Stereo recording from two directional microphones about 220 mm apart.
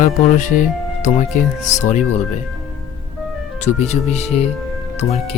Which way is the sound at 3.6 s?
30° left (ahead or behind).